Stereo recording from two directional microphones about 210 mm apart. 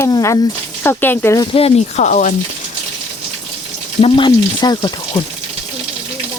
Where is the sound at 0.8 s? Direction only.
10° left (ahead or behind).